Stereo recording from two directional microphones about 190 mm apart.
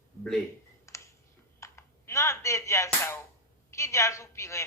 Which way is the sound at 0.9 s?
15° left (ahead or behind).